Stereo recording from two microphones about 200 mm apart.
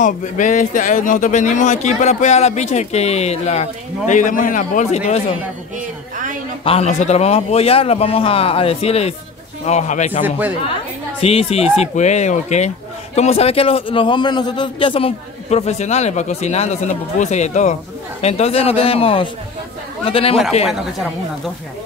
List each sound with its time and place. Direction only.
0.0 s speech: 40° left (ahead or behind)
6.6 s a man's voice: 30° left (ahead or behind)